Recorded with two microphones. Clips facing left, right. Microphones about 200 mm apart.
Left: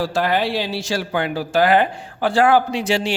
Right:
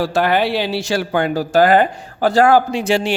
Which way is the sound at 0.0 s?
65° right (ahead or behind).